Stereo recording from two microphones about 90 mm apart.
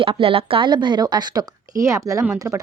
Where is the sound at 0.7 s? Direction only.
55° right (ahead or behind); by 2.6 s 30° right (ahead or behind).